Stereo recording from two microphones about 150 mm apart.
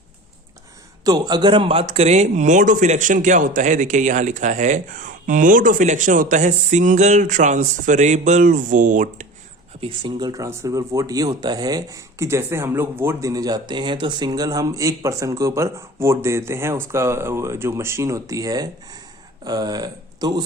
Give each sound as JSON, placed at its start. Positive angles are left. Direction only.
{"t": 1.0, "sound": "a man's voice", "side_deg": -25}
{"t": 9.8, "sound": "speech", "side_deg": -35}